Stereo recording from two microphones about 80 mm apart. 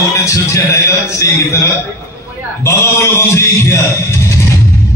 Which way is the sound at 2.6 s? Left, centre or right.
Left.